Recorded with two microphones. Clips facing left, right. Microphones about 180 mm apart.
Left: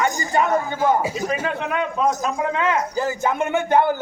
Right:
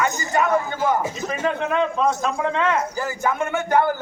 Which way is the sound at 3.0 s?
20° left (ahead or behind).